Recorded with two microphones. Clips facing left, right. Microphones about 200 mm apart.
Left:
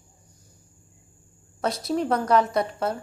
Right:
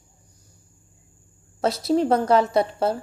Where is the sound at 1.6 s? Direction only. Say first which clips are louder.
Right 5 dB; 25° right (ahead or behind).